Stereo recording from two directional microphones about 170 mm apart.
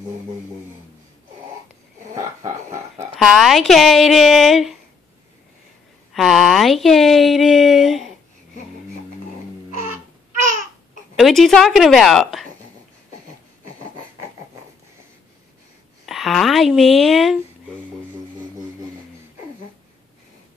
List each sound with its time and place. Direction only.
2.1 s a sound: 20° right (ahead or behind)
3.2 s speech: centre (ahead or behind)
6.1 s speech: centre (ahead or behind)
11.1 s speech: centre (ahead or behind)
16.1 s speech: centre (ahead or behind)